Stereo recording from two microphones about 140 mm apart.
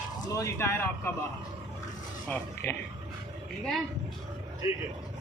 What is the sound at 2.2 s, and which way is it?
Speech, 15° left (ahead or behind).